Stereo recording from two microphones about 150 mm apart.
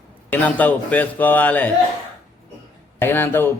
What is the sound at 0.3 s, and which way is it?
Speech, 10° left (ahead or behind).